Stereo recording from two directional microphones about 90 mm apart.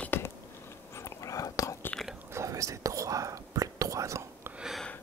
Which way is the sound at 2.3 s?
35° right (ahead or behind).